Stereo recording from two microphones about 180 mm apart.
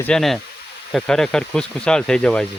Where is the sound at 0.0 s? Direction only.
5° left (ahead or behind).